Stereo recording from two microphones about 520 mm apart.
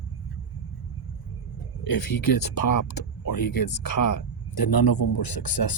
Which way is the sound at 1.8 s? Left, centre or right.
Left.